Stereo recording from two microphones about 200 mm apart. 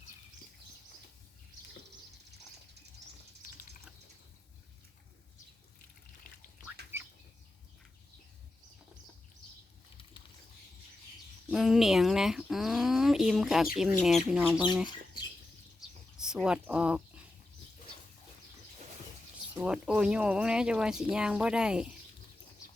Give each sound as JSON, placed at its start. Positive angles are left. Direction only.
{"t": 6.9, "sound": "bird", "side_deg": -10}
{"t": 11.4, "sound": "a sound", "side_deg": 0}
{"t": 13.7, "sound": "speech", "side_deg": 0}
{"t": 16.1, "sound": "speech", "side_deg": -5}
{"t": 19.5, "sound": "speech", "side_deg": -5}